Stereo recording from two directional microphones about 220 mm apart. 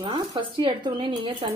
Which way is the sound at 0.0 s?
20° right (ahead or behind).